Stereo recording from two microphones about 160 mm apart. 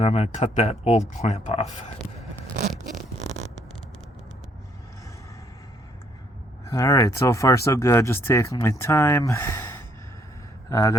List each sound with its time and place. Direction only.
0.0 s speech: 40° left (ahead or behind)
6.7 s a man's voice: 20° left (ahead or behind)